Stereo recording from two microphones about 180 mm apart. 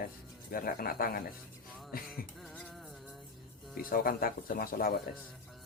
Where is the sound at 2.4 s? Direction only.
5° left (ahead or behind).